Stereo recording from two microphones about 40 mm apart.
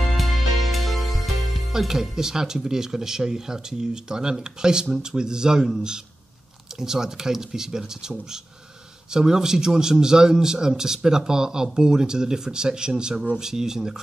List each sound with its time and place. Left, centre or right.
0.2 s music: centre
1.7 s speech: centre